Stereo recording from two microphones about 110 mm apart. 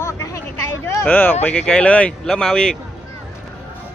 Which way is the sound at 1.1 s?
15° left (ahead or behind).